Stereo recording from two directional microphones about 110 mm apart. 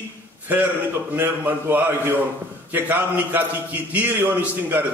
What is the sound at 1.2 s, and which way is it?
A man's voice, 20° right (ahead or behind).